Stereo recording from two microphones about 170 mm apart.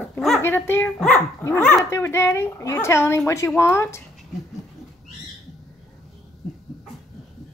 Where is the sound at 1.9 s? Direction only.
15° left (ahead or behind).